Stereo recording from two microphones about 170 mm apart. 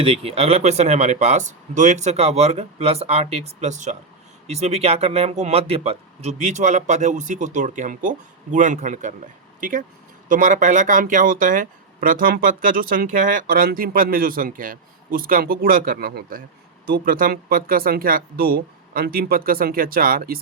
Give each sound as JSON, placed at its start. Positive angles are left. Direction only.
{"t": 0.0, "sound": "speech", "side_deg": -35}